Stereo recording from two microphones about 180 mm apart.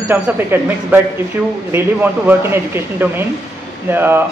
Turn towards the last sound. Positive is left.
turn(degrees=-10)  # may be behind; listen again after turning